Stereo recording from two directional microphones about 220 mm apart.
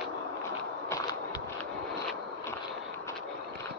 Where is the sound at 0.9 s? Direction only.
15° left (ahead or behind).